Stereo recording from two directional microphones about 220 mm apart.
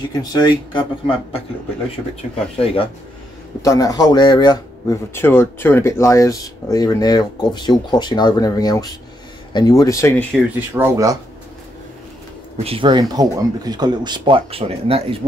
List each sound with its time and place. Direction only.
0.2 s speech: 20° left (ahead or behind)
2.6 s speech: 25° left (ahead or behind)
10.7 s speech: 10° right (ahead or behind)
12.5 s speech: 25° right (ahead or behind)